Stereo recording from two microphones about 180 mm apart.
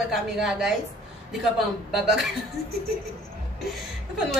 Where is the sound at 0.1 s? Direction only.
Centre (ahead or behind).